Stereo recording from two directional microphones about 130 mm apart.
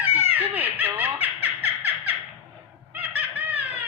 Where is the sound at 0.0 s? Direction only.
15° right (ahead or behind).